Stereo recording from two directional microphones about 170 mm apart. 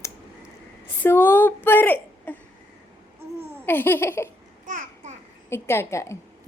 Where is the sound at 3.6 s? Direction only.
10° left (ahead or behind).